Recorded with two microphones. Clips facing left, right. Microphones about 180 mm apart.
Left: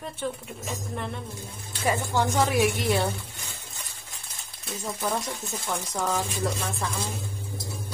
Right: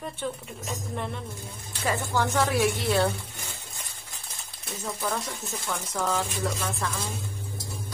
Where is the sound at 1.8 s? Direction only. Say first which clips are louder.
Left 2 dB; 20° left (ahead or behind).